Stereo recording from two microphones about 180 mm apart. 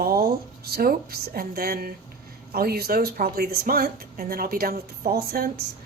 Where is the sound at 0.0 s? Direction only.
55° right (ahead or behind).